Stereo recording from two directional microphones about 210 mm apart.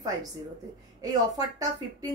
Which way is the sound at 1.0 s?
15° right (ahead or behind).